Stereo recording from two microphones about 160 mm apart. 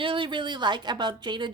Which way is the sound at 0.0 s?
30° right (ahead or behind).